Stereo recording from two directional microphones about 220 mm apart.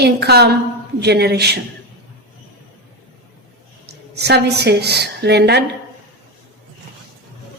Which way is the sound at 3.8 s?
50° right (ahead or behind).